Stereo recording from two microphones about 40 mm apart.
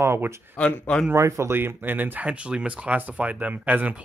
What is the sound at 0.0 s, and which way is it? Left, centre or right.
Speech, right.